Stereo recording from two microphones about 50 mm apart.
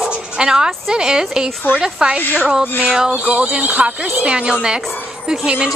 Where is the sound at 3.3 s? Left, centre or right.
Right.